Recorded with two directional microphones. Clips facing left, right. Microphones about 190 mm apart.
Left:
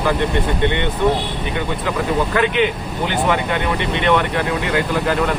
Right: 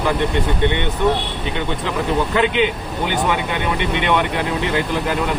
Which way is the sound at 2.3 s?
20° right (ahead or behind).